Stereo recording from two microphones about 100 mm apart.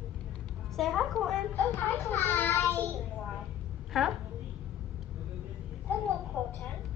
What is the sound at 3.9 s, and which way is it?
Speech, 5° right (ahead or behind).